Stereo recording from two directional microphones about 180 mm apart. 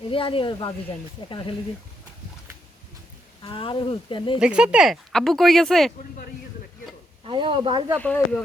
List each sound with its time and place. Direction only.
0.1 s speech: 30° left (ahead or behind)
3.4 s speech: 30° left (ahead or behind)
4.4 s speech: 5° right (ahead or behind)
7.3 s speech: 30° right (ahead or behind)
7.9 s speech: 5° left (ahead or behind)